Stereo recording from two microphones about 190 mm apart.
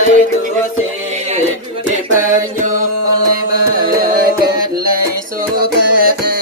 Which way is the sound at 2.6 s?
45° right (ahead or behind).